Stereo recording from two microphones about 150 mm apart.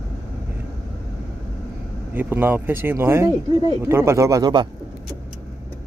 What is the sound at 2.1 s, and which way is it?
Speech, 15° right (ahead or behind).